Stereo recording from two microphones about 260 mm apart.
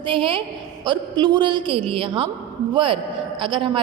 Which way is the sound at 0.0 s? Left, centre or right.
Centre.